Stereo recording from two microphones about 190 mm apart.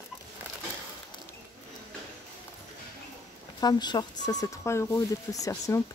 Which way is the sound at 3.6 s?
20° left (ahead or behind).